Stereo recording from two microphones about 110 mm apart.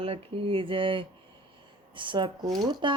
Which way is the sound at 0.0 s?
55° right (ahead or behind).